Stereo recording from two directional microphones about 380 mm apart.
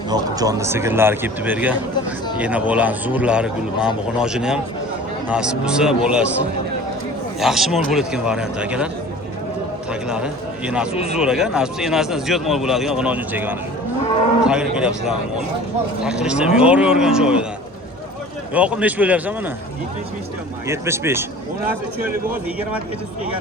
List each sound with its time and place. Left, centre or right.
0.1 s a man's voice: centre
7.3 s a man's voice: centre
9.9 s a man's voice: centre
10.9 s a man's voice: centre
11.2 s a man's voice: centre
18.5 s a man's voice: centre
20.7 s a man's voice: centre